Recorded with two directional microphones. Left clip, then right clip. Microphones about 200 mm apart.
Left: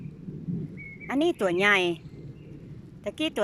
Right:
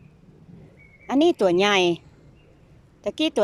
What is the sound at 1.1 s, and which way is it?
Speech, 10° right (ahead or behind).